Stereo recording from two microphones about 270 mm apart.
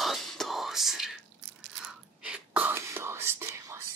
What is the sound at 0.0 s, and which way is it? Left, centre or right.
Whispering, centre.